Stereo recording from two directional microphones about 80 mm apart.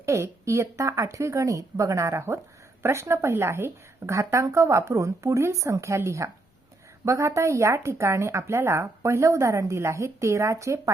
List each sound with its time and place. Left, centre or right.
0.0 s speech: right